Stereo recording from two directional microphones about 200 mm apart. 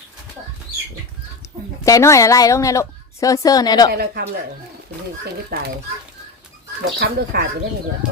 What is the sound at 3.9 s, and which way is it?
Speech, 55° right (ahead or behind).